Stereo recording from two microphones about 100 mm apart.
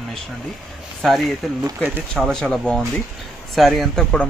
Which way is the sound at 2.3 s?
5° left (ahead or behind).